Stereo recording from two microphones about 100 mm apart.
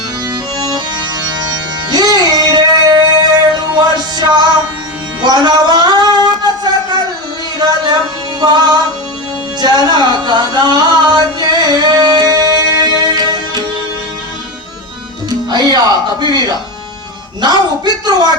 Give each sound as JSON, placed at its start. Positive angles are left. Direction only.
{"t": 0.6, "sound": "music", "side_deg": -40}
{"t": 6.2, "sound": "a sound", "side_deg": -45}
{"t": 8.4, "sound": "speech", "side_deg": -45}
{"t": 9.6, "sound": "music", "side_deg": -40}
{"t": 15.4, "sound": "speech", "side_deg": -45}